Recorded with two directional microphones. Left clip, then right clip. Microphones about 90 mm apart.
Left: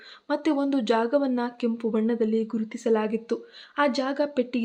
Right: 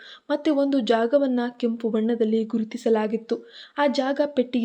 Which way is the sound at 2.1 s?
45° right (ahead or behind).